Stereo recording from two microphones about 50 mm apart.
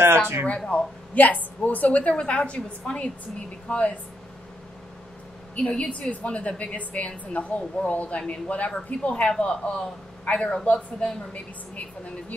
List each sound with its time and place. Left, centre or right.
0.7 s a woman's voice: left
5.6 s a woman's voice: left